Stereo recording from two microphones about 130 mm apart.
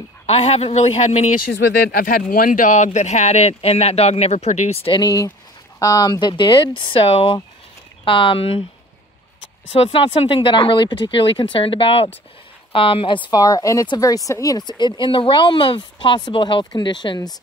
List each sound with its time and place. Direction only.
0.3 s speech: 50° left (ahead or behind)
2.0 s speech: 90° left; by 5.0 s 45° left (ahead or behind)
5.0 s speech: 30° left (ahead or behind); by 8.6 s 45° left (ahead or behind)
9.7 s speech: 50° left (ahead or behind); by 17.4 s 35° left (ahead or behind)